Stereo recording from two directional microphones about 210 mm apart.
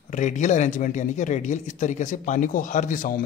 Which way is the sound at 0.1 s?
35° left (ahead or behind).